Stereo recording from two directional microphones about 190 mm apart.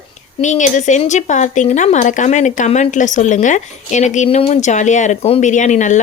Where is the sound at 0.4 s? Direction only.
40° left (ahead or behind).